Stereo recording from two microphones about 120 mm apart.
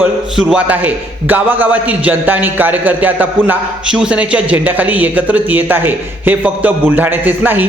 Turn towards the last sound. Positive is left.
turn(degrees=-15)  # may be behind; listen again after turning